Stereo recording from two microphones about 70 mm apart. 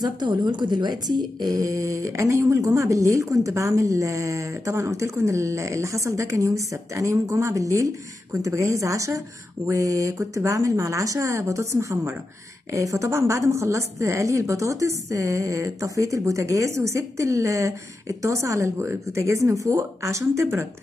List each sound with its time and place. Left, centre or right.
0.0 s a woman's voice: right